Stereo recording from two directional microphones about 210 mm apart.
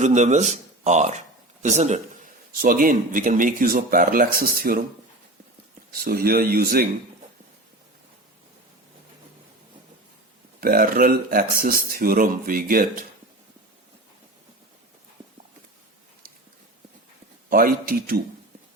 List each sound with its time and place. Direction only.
0.0 s a man's voice: 35° right (ahead or behind)
5.9 s speech: 45° right (ahead or behind)
10.6 s speech: 45° right (ahead or behind)
17.5 s speech: 45° right (ahead or behind)